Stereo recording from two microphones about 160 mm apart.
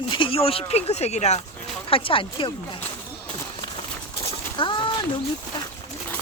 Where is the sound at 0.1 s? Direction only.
35° left (ahead or behind).